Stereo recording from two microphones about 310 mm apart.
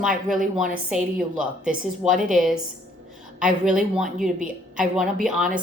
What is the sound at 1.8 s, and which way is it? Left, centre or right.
Speech, right.